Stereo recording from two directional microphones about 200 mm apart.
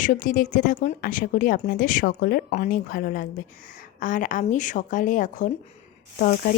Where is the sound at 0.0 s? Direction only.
40° left (ahead or behind).